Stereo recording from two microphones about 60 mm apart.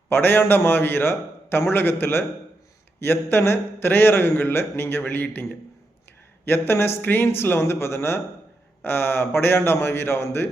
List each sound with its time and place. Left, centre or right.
0.1 s a man's voice: left